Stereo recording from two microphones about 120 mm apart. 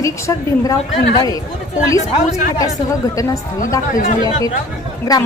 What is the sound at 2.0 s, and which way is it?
Speech, 90° left.